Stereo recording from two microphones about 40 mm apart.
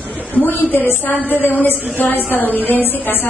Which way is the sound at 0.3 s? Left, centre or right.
Left.